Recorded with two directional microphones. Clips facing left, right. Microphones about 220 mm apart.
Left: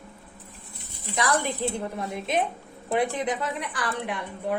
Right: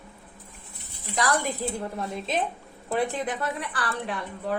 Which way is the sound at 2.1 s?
15° left (ahead or behind).